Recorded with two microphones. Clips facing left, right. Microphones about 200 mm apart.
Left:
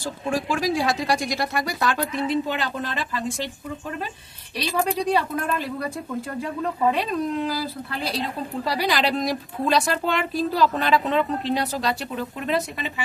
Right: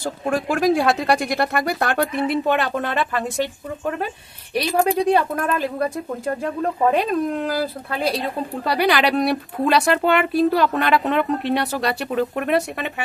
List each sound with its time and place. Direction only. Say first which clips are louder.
0.0 s speech: right 3 dB; 55° right (ahead or behind)
4.9 s speech: right 4 dB; 50° right (ahead or behind)